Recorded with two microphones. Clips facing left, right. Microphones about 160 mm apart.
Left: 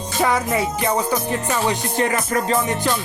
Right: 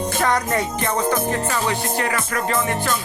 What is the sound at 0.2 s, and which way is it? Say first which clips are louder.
Music: left 3 dB; 5° left (ahead or behind).